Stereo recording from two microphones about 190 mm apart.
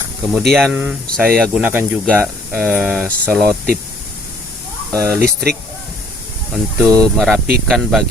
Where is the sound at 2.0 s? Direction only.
5° left (ahead or behind).